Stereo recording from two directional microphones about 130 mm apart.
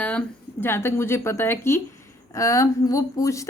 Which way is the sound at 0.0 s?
10° left (ahead or behind).